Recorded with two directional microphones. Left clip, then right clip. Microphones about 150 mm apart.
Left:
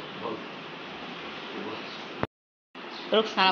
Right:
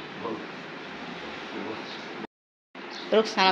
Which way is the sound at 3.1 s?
20° right (ahead or behind).